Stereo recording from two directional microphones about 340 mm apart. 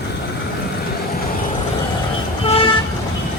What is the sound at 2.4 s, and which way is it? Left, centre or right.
Vehicle, centre.